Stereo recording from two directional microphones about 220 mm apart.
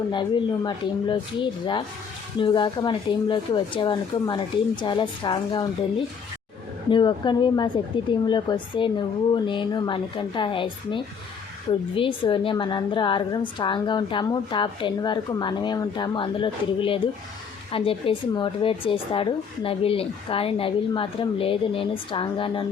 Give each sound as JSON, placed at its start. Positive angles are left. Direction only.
{"t": 0.1, "sound": "a woman's voice", "side_deg": 20}
{"t": 6.9, "sound": "a woman's voice", "side_deg": 20}